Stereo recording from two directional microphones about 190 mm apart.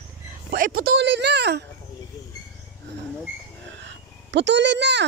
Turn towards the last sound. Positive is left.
turn(degrees=-65)  # may be behind; listen again after turning